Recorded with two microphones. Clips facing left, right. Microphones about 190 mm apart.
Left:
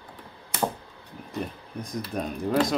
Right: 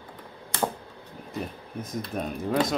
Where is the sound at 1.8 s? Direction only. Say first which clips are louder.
Even; centre (ahead or behind).